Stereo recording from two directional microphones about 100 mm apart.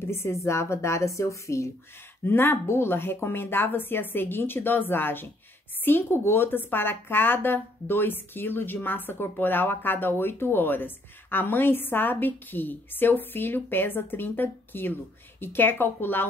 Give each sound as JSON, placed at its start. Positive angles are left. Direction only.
{"t": 0.0, "sound": "a woman's voice", "side_deg": 25}